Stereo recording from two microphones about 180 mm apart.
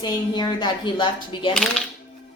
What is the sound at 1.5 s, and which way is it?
Speech, 5° left (ahead or behind).